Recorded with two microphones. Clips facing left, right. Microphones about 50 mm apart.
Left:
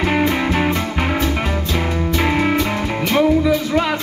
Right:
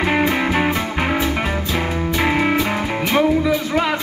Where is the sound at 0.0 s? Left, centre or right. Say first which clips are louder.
Even; centre.